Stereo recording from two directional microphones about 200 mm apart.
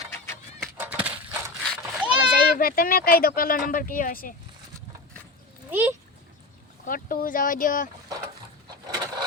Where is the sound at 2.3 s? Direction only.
45° left (ahead or behind).